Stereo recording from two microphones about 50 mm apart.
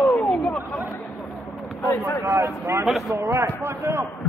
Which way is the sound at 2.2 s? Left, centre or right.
Right.